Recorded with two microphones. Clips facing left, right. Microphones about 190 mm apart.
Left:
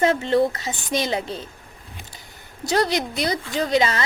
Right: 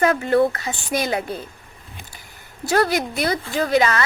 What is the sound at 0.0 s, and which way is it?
Speech, 25° left (ahead or behind).